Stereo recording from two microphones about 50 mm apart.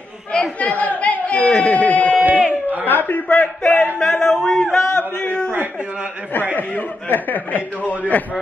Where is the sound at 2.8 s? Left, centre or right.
Left.